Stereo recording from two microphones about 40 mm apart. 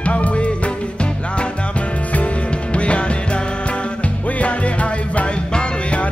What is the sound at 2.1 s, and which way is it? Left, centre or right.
Music, left.